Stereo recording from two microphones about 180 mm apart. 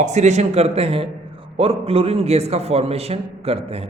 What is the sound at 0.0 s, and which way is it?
A man's voice, 40° right (ahead or behind).